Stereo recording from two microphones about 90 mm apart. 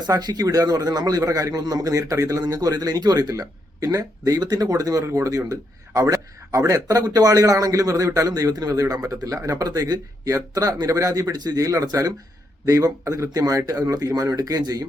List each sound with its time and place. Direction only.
0.0 s speech: 50° right (ahead or behind)